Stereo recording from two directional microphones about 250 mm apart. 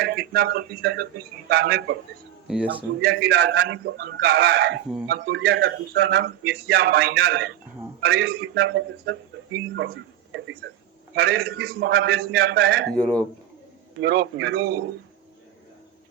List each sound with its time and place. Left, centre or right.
0.0 s speech: right
2.5 s speech: centre
3.0 s speech: right
9.7 s a sound: right
11.1 s speech: right
12.9 s speech: centre
14.0 s speech: right